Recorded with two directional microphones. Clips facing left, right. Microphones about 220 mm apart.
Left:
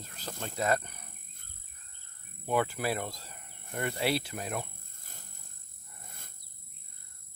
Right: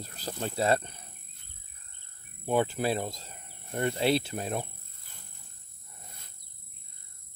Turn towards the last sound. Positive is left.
turn(degrees=50)  # may be behind; listen again after turning